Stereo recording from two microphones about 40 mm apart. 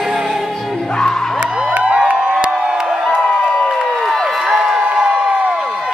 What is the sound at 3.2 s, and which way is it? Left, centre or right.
Crowd, centre.